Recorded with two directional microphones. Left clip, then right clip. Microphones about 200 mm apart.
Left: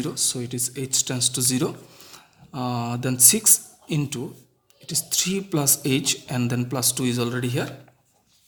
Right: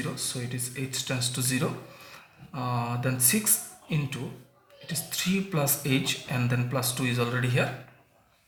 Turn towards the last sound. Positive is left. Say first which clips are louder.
# left 2 dB
turn(degrees=50)  # may be behind; listen again after turning